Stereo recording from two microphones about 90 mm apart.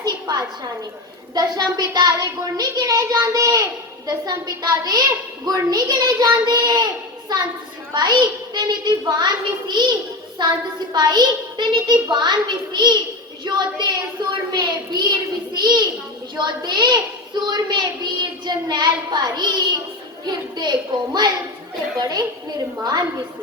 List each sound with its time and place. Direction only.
0.0 s a sound: 45° right (ahead or behind)
1.3 s a woman's voice: 45° right (ahead or behind)
22.8 s a woman's voice: 50° right (ahead or behind)